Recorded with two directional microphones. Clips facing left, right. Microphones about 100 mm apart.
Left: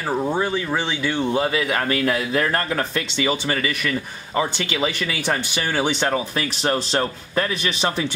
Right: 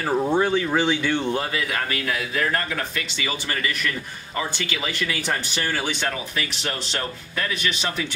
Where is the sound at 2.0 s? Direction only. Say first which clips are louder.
Left 4 dB; 40° left (ahead or behind).